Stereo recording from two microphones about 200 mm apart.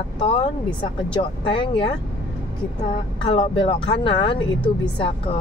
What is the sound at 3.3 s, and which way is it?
Speech, 25° left (ahead or behind).